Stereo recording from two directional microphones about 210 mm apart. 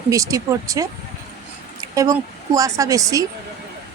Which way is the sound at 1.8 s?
15° right (ahead or behind).